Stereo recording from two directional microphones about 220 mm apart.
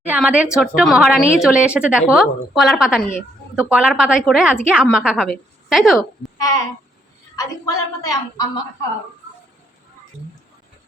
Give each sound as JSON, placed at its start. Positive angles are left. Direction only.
{"t": 0.1, "sound": "a woman's voice", "side_deg": -5}
{"t": 6.4, "sound": "a sound", "side_deg": 15}
{"t": 7.3, "sound": "a woman's voice", "side_deg": 15}